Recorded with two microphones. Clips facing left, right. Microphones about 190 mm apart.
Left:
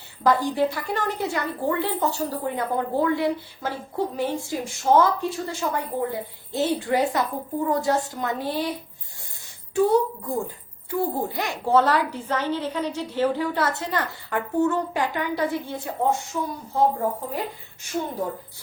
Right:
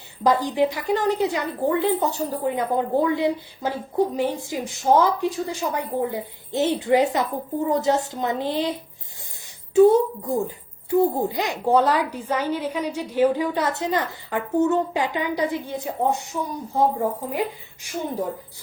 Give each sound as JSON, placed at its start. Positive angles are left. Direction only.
{"t": 0.2, "sound": "a woman's voice", "side_deg": -20}